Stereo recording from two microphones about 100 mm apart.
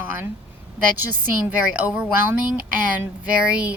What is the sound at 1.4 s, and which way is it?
Speech, 15° right (ahead or behind).